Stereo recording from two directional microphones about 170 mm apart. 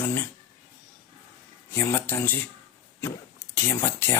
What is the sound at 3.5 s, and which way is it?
Speech, 15° left (ahead or behind).